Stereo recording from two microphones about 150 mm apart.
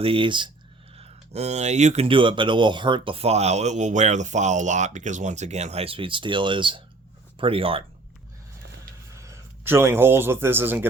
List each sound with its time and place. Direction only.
0.0 s speech: 35° right (ahead or behind)
0.9 s speech: 45° right (ahead or behind)
2.0 s speech: 35° right (ahead or behind)
9.1 s a man's voice: 20° right (ahead or behind)